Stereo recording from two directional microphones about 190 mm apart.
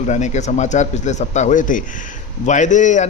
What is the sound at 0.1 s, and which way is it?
A man's voice, 40° left (ahead or behind).